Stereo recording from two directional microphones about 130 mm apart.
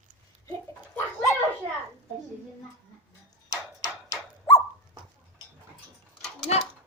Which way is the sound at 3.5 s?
25° left (ahead or behind).